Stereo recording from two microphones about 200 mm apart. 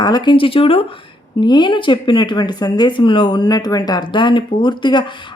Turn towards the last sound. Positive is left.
turn(degrees=25)  # may be behind; listen again after turning